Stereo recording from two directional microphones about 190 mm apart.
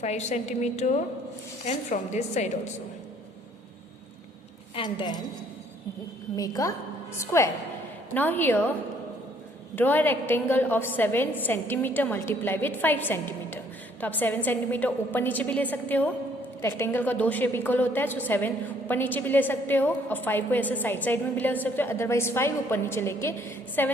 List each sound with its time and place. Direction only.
0.0 s a woman's voice: 35° left (ahead or behind)
4.7 s a woman's voice: 25° left (ahead or behind)
6.3 s a woman's voice: 20° left (ahead or behind)
9.7 s a woman's voice: 10° left (ahead or behind)